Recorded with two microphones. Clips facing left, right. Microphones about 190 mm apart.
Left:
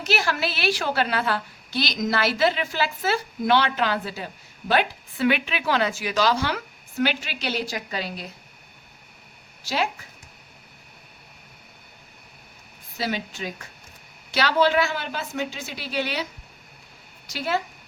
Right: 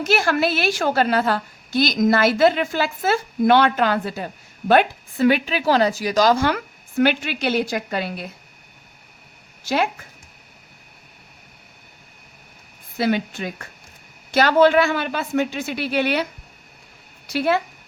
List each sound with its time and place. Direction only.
0.0 s a woman's voice: 50° right (ahead or behind)
9.6 s a woman's voice: 55° right (ahead or behind)
13.0 s a man's voice: 55° right (ahead or behind)
17.2 s speech: 60° right (ahead or behind)